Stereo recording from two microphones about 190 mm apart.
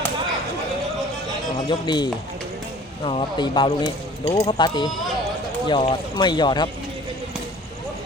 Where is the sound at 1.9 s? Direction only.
20° left (ahead or behind).